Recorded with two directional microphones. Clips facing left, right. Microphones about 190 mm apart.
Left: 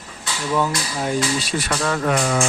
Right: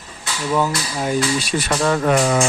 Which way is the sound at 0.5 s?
5° right (ahead or behind).